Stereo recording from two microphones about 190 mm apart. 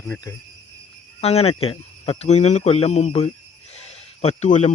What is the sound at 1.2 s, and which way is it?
A man's voice, 35° left (ahead or behind).